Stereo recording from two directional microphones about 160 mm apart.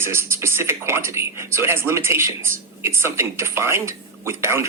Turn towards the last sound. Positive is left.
turn(degrees=-15)  # may be behind; listen again after turning